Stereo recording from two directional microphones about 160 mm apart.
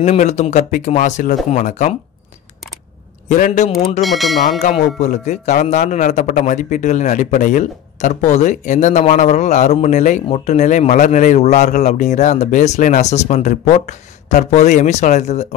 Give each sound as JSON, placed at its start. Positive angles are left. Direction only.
{"t": 0.0, "sound": "speech", "side_deg": 45}
{"t": 3.3, "sound": "speech", "side_deg": 50}
{"t": 4.0, "sound": "speech", "side_deg": 0}
{"t": 4.5, "sound": "speech", "side_deg": 45}